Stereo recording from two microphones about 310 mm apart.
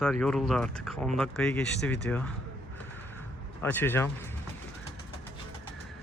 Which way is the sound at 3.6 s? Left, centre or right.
Centre.